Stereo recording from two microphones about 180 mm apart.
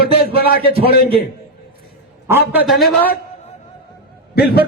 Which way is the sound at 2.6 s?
Centre (ahead or behind).